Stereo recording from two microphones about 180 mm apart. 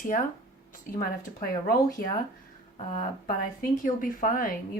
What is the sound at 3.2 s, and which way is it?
Speech, 50° left (ahead or behind).